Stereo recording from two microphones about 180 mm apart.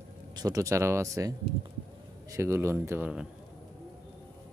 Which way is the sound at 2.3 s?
15° right (ahead or behind).